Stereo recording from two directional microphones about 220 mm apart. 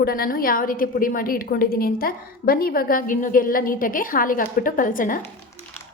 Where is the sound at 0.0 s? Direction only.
40° left (ahead or behind).